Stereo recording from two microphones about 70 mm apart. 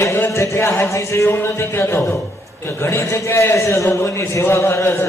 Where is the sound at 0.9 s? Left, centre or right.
Left.